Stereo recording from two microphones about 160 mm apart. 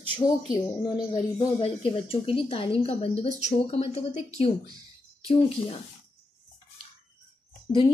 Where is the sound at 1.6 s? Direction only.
35° left (ahead or behind).